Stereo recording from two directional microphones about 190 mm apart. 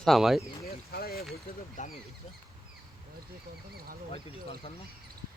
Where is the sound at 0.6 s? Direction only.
55° left (ahead or behind).